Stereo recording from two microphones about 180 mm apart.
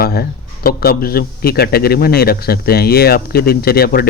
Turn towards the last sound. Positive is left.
turn(degrees=55)  # may be behind; listen again after turning